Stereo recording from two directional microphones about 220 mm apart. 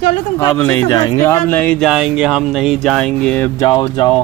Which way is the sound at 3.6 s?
20° left (ahead or behind).